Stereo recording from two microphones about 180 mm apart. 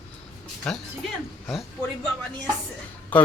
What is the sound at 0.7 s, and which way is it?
Speech, 5° left (ahead or behind).